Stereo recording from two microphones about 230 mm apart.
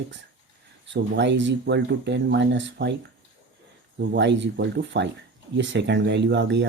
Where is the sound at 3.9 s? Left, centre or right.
Right.